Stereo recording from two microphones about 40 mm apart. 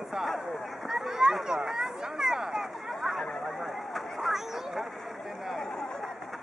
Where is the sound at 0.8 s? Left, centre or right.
Centre.